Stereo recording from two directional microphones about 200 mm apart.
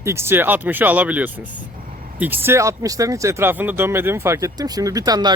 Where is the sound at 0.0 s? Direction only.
15° right (ahead or behind).